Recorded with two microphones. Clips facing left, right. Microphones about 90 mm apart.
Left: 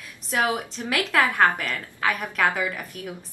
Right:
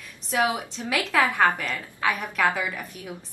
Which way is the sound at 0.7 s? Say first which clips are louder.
Left 1 dB; centre (ahead or behind).